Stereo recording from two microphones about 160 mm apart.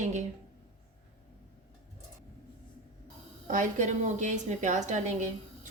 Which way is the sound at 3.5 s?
50° right (ahead or behind).